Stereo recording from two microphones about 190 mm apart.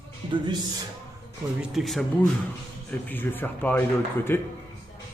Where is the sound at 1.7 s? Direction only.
Centre (ahead or behind).